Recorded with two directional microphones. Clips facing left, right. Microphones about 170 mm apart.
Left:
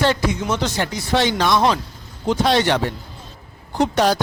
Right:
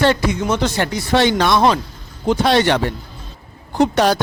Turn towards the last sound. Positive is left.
turn(degrees=-65)  # may be behind; listen again after turning